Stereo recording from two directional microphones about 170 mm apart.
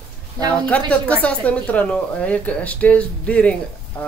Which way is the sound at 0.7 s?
10° left (ahead or behind).